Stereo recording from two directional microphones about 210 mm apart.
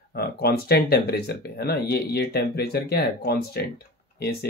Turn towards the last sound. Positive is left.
turn(degrees=50)  # may be behind; listen again after turning